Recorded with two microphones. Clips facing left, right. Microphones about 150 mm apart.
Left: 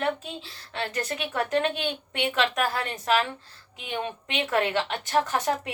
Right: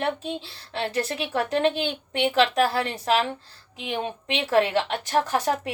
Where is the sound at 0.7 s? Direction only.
30° right (ahead or behind).